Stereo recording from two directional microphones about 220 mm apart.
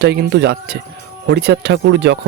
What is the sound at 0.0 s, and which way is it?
Speech, 50° right (ahead or behind).